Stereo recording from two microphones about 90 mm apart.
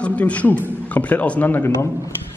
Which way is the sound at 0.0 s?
15° left (ahead or behind).